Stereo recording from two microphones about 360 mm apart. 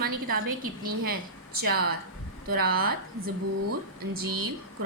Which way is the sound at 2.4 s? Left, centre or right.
Right.